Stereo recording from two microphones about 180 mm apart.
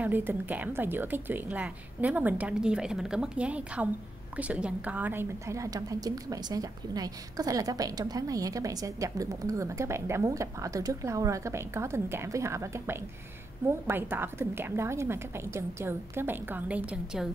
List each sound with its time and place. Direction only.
0.0 s a woman's voice: 10° right (ahead or behind)